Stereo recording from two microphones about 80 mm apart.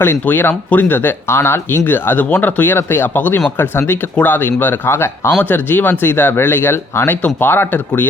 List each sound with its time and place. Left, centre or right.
0.0 s speech: left